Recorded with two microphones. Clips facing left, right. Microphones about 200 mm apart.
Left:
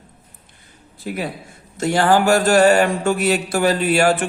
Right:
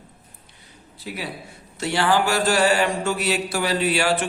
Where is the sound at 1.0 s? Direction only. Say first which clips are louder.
Left 6 dB; 50° left (ahead or behind).